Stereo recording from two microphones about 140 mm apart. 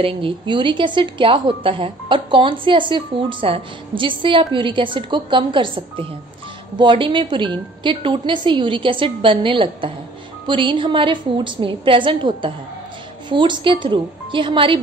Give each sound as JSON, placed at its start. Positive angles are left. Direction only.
{"t": 0.0, "sound": "a woman's voice", "side_deg": -35}